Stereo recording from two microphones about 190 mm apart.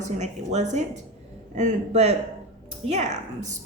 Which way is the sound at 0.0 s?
40° right (ahead or behind).